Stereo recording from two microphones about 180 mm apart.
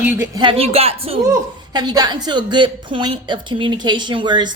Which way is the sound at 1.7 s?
20° right (ahead or behind).